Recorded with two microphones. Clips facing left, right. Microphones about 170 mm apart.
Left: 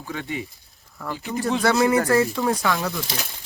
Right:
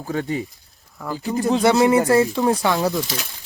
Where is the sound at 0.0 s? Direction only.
40° right (ahead or behind).